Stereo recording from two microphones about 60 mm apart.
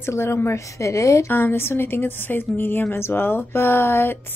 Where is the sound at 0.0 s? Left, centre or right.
Left.